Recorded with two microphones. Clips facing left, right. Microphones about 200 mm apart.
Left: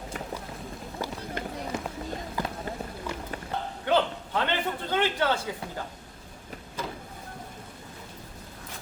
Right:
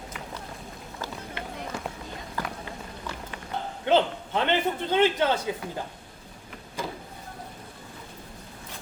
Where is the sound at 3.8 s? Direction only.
20° right (ahead or behind).